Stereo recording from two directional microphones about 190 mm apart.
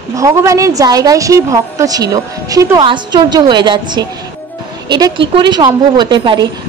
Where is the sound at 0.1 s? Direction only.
15° right (ahead or behind).